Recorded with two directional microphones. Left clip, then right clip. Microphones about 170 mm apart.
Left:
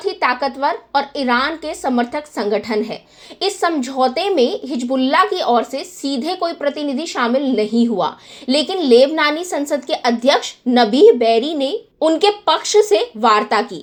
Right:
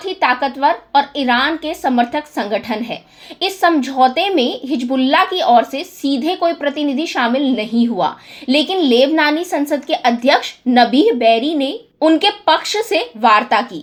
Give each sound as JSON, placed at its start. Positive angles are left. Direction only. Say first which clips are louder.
{"t": 0.0, "sound": "a woman's voice", "louder": "right 2 dB", "side_deg": 30}